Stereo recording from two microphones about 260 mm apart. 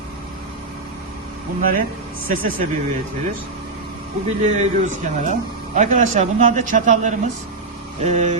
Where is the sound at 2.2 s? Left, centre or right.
Right.